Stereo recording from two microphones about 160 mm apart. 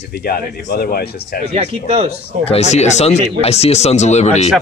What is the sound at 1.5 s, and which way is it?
Speech, 40° right (ahead or behind).